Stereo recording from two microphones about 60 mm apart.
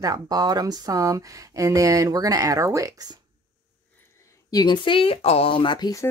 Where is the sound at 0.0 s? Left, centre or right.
Right.